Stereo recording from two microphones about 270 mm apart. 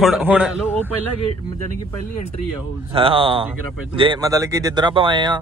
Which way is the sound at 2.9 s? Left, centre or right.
Centre.